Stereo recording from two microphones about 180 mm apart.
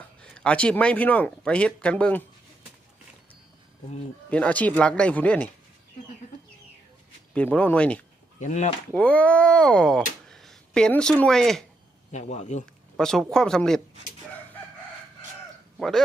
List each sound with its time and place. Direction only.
0.2 s speech: 5° left (ahead or behind)
4.3 s speech: 10° left (ahead or behind)
7.3 s speech: 10° left (ahead or behind)
8.4 s speech: 40° left (ahead or behind)
8.9 s speech: 5° left (ahead or behind)
12.1 s speech: 40° left (ahead or behind)
13.0 s speech: 5° left (ahead or behind)